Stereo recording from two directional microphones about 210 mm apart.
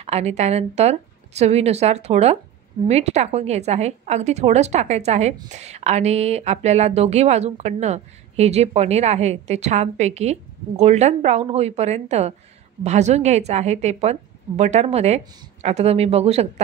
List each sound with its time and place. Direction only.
0.0 s speech: 30° right (ahead or behind)